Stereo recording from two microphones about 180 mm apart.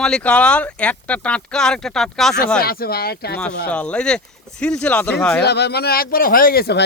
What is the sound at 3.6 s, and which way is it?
Speech, 5° left (ahead or behind).